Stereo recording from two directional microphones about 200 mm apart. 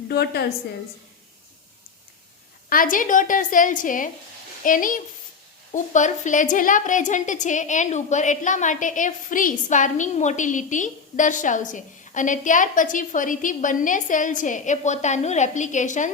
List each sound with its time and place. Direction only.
0.1 s a woman's voice: 55° left (ahead or behind)
2.6 s a woman's voice: 45° left (ahead or behind)